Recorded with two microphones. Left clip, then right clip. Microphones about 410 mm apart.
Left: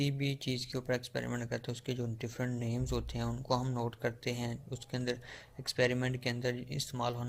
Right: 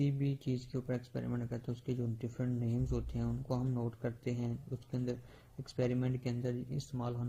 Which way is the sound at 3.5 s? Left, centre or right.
Left.